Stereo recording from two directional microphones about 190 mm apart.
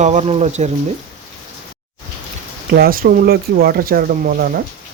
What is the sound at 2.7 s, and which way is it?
Speech, 50° right (ahead or behind).